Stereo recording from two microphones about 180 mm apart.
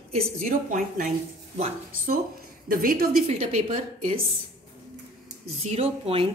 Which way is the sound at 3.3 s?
35° right (ahead or behind).